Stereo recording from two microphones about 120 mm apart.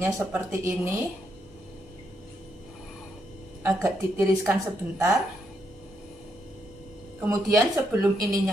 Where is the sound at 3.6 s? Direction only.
20° right (ahead or behind).